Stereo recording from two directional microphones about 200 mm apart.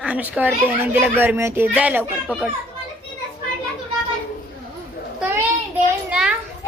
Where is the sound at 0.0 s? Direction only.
5° right (ahead or behind).